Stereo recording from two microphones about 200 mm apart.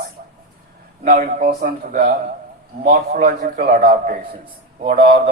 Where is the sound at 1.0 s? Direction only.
40° right (ahead or behind).